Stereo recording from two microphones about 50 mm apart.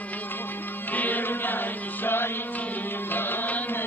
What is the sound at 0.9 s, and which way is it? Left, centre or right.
Music, left.